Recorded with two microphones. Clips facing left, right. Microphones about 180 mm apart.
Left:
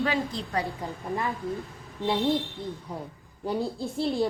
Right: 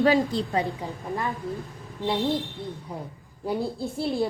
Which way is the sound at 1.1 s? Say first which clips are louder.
Even; centre (ahead or behind).